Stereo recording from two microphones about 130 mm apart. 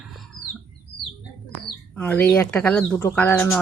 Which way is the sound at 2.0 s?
10° left (ahead or behind).